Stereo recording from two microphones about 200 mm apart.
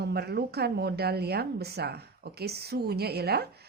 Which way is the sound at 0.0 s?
55° right (ahead or behind).